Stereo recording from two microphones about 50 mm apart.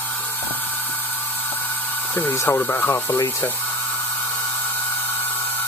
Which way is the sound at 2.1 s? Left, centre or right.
Left.